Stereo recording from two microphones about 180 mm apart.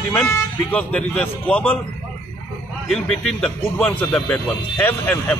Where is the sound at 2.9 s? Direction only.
5° left (ahead or behind).